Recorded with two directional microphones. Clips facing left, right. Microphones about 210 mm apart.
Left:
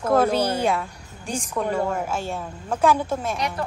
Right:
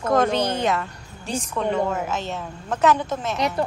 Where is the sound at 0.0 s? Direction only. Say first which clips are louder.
Left 1 dB; 10° left (ahead or behind).